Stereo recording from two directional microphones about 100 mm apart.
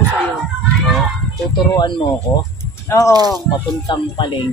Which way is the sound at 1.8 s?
50° left (ahead or behind).